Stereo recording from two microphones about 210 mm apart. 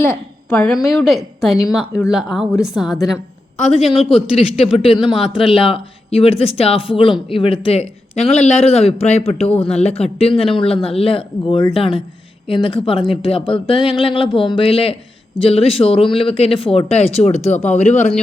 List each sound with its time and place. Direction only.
0.0 s a woman's voice: 5° left (ahead or behind)
4.1 s a man's voice: 30° left (ahead or behind)